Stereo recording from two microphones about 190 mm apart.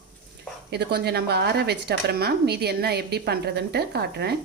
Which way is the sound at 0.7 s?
60° right (ahead or behind).